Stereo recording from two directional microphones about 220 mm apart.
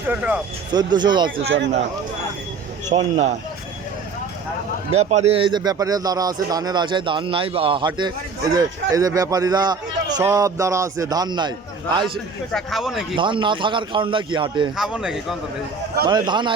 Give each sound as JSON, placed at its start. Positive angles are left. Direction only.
{"t": 0.1, "sound": "speech", "side_deg": -5}
{"t": 0.7, "sound": "speech", "side_deg": -20}
{"t": 2.9, "sound": "speech", "side_deg": -30}
{"t": 4.9, "sound": "speech", "side_deg": -30}
{"t": 12.5, "sound": "speech", "side_deg": 0}
{"t": 13.1, "sound": "speech", "side_deg": -20}
{"t": 14.8, "sound": "speech", "side_deg": 0}
{"t": 16.0, "sound": "speech", "side_deg": -20}